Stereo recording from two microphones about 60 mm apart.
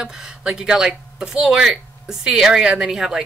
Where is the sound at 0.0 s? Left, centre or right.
Centre.